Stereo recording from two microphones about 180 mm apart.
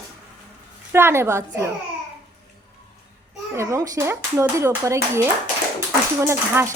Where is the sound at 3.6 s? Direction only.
15° right (ahead or behind).